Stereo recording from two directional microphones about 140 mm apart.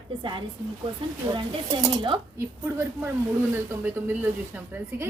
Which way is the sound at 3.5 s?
15° right (ahead or behind).